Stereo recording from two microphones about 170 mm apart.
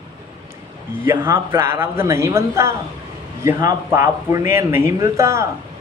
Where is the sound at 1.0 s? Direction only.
15° right (ahead or behind).